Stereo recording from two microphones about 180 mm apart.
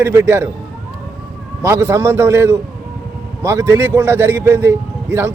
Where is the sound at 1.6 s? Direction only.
15° right (ahead or behind).